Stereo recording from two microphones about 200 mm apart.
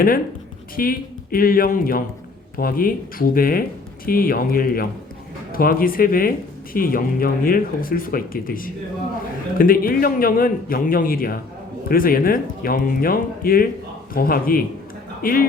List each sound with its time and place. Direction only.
0.8 s a man's voice: 45° left (ahead or behind)